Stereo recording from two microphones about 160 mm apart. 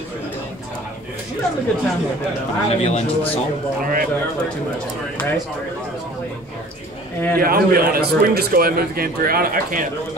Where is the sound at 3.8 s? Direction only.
65° right (ahead or behind).